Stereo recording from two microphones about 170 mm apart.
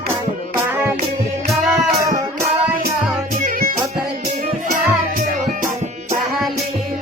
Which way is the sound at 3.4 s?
55° right (ahead or behind).